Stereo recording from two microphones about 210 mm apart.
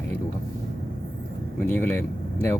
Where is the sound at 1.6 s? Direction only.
10° left (ahead or behind).